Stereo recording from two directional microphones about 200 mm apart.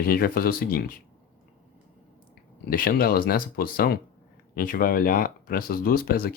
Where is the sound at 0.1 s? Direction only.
50° left (ahead or behind).